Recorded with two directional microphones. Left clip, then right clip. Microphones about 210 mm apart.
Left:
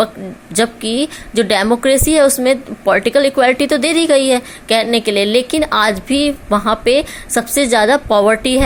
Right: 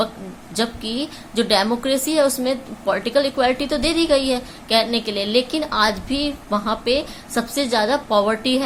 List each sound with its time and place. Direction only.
0.5 s a woman's voice: 35° left (ahead or behind)